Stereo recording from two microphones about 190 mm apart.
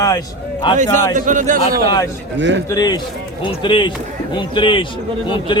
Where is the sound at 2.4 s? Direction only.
70° right (ahead or behind).